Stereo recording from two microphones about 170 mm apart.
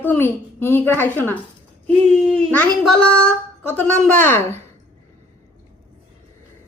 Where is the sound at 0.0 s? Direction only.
10° left (ahead or behind).